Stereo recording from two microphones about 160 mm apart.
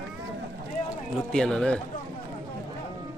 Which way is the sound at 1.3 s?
5° left (ahead or behind).